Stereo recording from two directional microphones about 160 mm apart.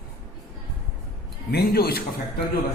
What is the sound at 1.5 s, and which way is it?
Speech, 75° left (ahead or behind).